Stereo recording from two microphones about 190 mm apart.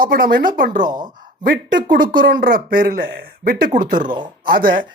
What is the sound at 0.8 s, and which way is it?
Speech, 25° right (ahead or behind).